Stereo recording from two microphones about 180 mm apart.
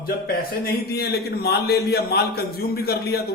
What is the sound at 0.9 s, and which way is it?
A man's voice, 60° left (ahead or behind).